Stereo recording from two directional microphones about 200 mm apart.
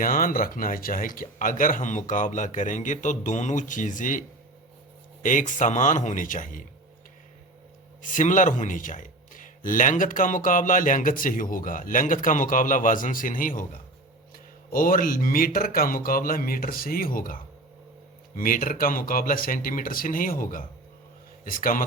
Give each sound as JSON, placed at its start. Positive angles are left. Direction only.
{"t": 0.0, "sound": "speech", "side_deg": 45}
{"t": 5.2, "sound": "speech", "side_deg": 40}
{"t": 8.0, "sound": "speech", "side_deg": 40}
{"t": 14.7, "sound": "speech", "side_deg": 45}